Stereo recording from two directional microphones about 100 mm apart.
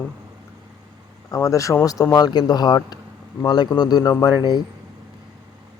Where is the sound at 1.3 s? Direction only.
35° left (ahead or behind).